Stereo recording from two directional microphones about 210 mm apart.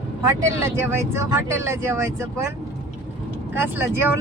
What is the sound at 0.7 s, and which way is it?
Speech, 10° right (ahead or behind).